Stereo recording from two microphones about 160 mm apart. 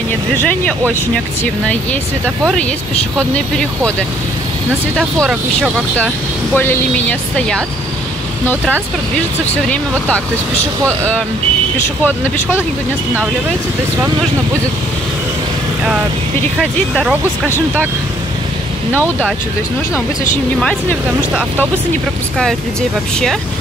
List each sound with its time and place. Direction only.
0.4 s speech: 10° left (ahead or behind)
3.2 s speech: 5° left (ahead or behind)
4.9 s speech: centre (ahead or behind)
5.9 s speech: 10° left (ahead or behind)
9.7 s speech: 10° left (ahead or behind)
18.9 s speech: 10° left (ahead or behind)
21.2 s speech: 10° right (ahead or behind)
22.4 s speech: 5° left (ahead or behind)